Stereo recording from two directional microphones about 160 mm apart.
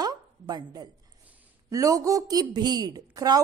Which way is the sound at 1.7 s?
20° right (ahead or behind).